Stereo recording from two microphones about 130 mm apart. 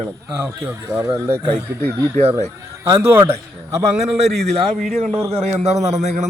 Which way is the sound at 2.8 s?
20° right (ahead or behind).